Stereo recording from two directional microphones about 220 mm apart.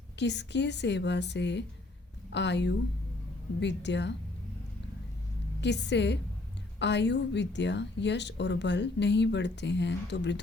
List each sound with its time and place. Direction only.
0.2 s a woman's voice: 50° left (ahead or behind)
5.5 s a woman's voice: 50° left (ahead or behind)